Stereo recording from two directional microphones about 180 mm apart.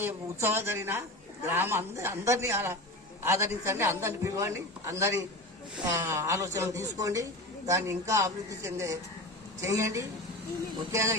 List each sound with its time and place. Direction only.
0.0 s a man's voice: 15° right (ahead or behind)